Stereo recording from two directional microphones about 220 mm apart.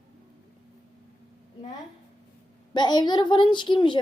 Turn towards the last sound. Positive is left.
turn(degrees=20)  # may be behind; listen again after turning